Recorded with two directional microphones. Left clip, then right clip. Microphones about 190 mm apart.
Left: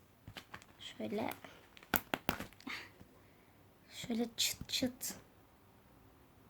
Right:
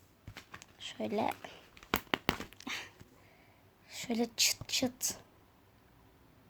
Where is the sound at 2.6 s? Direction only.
30° right (ahead or behind).